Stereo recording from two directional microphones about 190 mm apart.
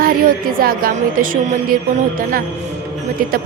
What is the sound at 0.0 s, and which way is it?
Music, 50° right (ahead or behind).